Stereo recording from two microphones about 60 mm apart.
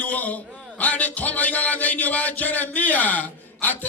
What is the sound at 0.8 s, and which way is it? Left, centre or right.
Speech, left.